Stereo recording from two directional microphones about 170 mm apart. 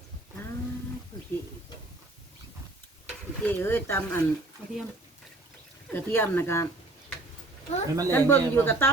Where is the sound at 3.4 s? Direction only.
10° left (ahead or behind).